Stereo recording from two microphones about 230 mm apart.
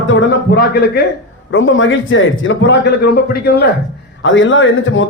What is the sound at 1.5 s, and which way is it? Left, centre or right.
A man's voice, left.